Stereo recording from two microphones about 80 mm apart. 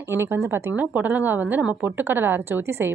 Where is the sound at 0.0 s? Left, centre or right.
Right.